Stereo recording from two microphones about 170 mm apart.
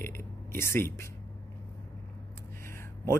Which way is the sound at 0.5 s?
15° left (ahead or behind).